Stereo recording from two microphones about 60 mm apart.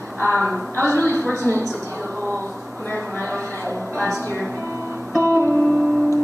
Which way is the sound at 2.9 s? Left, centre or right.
Left.